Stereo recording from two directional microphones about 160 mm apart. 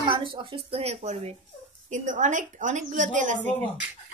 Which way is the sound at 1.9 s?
50° right (ahead or behind).